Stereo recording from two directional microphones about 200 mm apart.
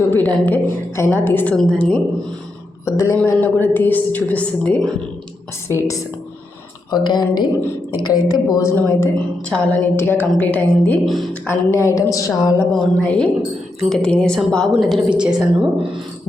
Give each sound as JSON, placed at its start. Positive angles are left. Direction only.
{"t": 0.1, "sound": "a woman's voice", "side_deg": 10}
{"t": 6.9, "sound": "a woman's voice", "side_deg": 20}
{"t": 11.4, "sound": "a woman's voice", "side_deg": 15}
{"t": 12.7, "sound": "a woman's voice", "side_deg": 5}